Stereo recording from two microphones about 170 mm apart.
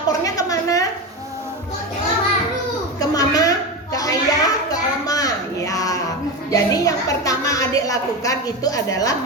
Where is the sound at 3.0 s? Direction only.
20° left (ahead or behind).